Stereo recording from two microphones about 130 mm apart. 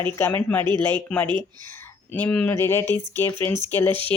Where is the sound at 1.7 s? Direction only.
20° left (ahead or behind).